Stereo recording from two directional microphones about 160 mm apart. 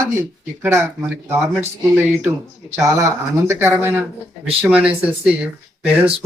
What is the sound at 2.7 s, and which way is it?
Speech, 15° right (ahead or behind).